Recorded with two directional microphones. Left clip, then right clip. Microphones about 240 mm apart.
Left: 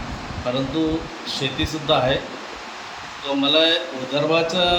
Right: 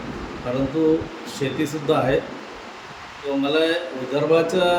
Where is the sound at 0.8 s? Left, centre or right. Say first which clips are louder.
Right 5 dB; centre.